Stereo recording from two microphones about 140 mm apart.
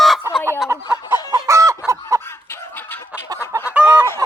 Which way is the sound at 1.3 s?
20° right (ahead or behind).